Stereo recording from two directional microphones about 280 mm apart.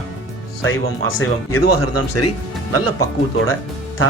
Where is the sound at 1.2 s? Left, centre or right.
Left.